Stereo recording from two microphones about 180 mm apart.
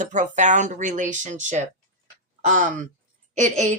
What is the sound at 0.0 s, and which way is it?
Speech, 45° right (ahead or behind).